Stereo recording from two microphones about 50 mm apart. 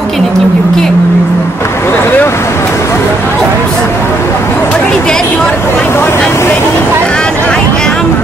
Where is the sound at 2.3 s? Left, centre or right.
Left.